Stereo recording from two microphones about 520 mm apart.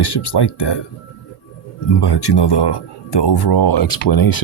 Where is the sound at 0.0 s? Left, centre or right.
Left.